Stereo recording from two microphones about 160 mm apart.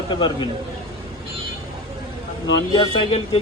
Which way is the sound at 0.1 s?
30° left (ahead or behind).